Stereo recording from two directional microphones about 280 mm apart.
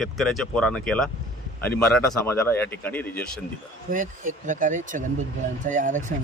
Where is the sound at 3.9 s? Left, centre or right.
Right.